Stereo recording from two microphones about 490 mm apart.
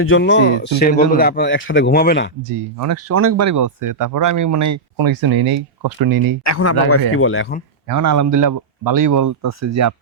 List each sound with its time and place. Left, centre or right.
0.0 s speech: left
2.5 s speech: right
6.4 s speech: left
7.9 s speech: right